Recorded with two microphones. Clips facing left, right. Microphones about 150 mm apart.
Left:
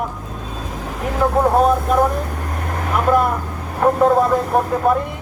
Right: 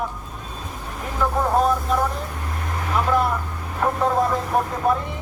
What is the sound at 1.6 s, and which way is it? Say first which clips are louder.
Speech: left 5 dB; 55° left (ahead or behind).